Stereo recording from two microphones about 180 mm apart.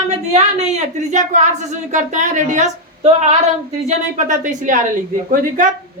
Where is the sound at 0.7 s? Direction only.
40° right (ahead or behind).